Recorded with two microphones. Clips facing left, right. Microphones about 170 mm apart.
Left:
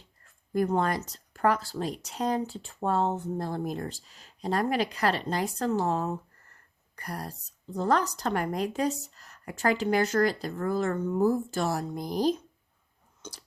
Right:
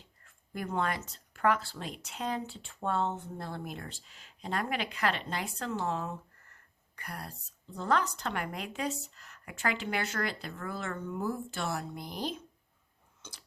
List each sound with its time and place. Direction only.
0.3 s speech: 40° left (ahead or behind)